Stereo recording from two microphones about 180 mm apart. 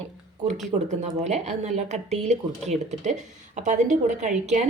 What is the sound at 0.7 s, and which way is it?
A woman's voice, 40° right (ahead or behind).